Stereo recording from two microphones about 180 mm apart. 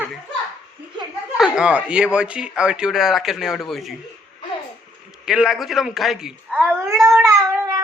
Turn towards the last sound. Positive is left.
turn(degrees=-15)  # may be behind; listen again after turning